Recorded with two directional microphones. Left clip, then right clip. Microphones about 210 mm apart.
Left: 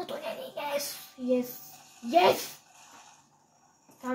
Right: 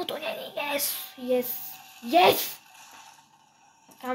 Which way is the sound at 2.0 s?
45° right (ahead or behind).